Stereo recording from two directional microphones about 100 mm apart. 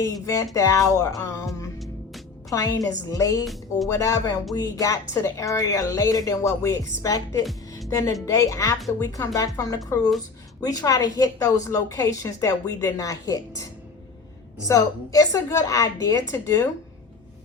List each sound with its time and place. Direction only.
0.0 s speech: 30° left (ahead or behind)
2.5 s speech: 35° left (ahead or behind)
3.4 s speech: centre (ahead or behind)
3.8 s speech: 30° left (ahead or behind)
14.7 s speech: 35° left (ahead or behind)